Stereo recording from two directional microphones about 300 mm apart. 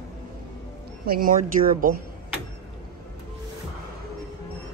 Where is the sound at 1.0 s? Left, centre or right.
Right.